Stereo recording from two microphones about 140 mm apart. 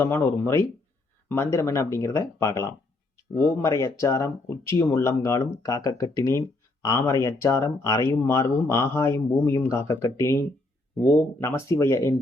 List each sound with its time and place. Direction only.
0.0 s speech: 15° left (ahead or behind)
11.3 s speech: 20° left (ahead or behind)